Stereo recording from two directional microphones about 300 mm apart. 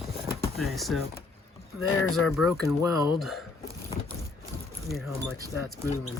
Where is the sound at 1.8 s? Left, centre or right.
Left.